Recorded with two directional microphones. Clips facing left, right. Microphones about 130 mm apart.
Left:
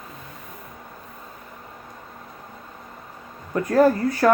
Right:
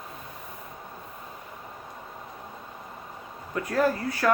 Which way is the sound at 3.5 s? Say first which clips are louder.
Left 7 dB; 45° left (ahead or behind).